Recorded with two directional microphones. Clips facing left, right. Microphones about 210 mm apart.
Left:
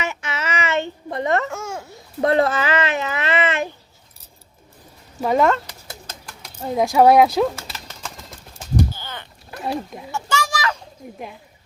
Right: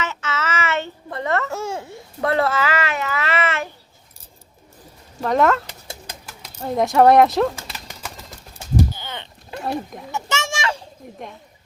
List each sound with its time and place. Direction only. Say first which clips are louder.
0.0 s a sound: right 1 dB; 15° left (ahead or behind)
1.5 s babbling: right 3 dB; 35° right (ahead or behind)
2.2 s babbling: left 2 dB; 20° left (ahead or behind)
5.2 s speech: even; 5° left (ahead or behind)
7.5 s bird: even; 15° right (ahead or behind)
8.9 s a sound: right 1 dB; 20° right (ahead or behind)
9.6 s speech: even; centre (ahead or behind)
10.1 s children playing: left 2 dB; 20° right (ahead or behind)